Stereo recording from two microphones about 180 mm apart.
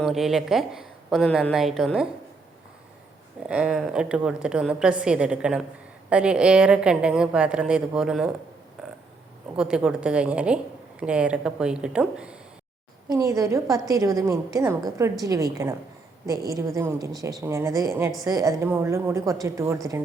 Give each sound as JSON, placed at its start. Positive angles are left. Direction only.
{"t": 0.0, "sound": "a woman's voice", "side_deg": 0}
{"t": 3.4, "sound": "a woman's voice", "side_deg": -5}
{"t": 8.8, "sound": "a sound", "side_deg": 0}
{"t": 9.6, "sound": "a woman's voice", "side_deg": -5}
{"t": 13.1, "sound": "a woman's voice", "side_deg": -20}
{"t": 16.5, "sound": "a woman's voice", "side_deg": -15}